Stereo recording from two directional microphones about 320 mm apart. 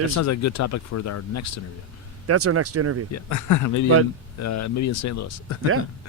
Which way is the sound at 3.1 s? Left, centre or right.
Left.